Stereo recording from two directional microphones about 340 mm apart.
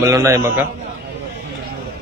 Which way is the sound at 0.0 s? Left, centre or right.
Centre.